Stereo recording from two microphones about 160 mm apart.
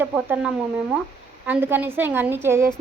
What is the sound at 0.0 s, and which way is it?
A woman's voice, 10° right (ahead or behind).